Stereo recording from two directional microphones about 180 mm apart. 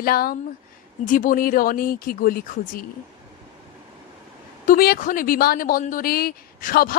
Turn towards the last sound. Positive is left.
turn(degrees=55)  # may be behind; listen again after turning